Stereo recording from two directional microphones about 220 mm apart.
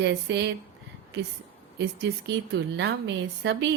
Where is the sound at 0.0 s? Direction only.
50° right (ahead or behind).